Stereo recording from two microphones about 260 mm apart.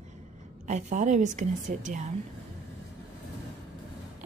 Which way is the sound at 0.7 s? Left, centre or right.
Right.